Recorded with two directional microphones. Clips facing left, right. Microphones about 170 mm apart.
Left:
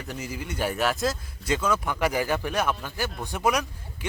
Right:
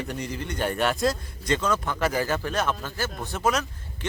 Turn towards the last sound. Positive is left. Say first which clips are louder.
# even
turn(degrees=15)  # may be behind; listen again after turning